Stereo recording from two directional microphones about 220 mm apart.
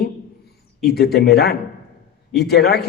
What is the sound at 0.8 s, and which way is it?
A man's voice, 45° left (ahead or behind).